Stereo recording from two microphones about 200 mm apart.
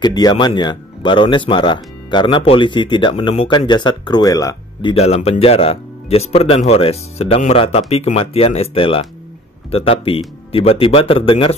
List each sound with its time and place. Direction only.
0.0 s speech: 20° left (ahead or behind)
4.9 s speech: 30° left (ahead or behind)